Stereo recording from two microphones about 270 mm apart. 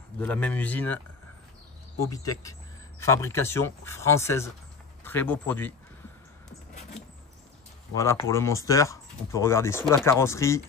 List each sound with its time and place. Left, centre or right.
0.2 s speech: centre
6.7 s rodents: left
7.9 s speech: centre